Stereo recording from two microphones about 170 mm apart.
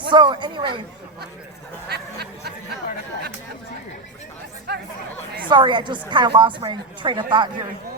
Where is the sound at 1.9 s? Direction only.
70° right (ahead or behind).